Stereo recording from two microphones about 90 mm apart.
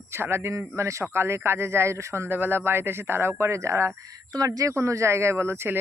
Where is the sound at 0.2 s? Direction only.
30° right (ahead or behind).